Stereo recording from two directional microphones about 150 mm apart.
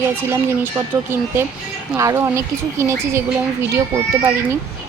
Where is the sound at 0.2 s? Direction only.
15° right (ahead or behind).